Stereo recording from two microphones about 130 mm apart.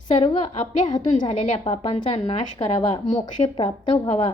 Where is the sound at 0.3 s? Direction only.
60° left (ahead or behind).